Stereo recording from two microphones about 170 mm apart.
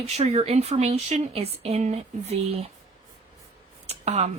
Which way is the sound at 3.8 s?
40° right (ahead or behind).